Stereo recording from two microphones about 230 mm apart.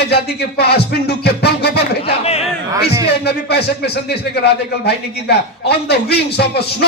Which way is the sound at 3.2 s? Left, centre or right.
Left.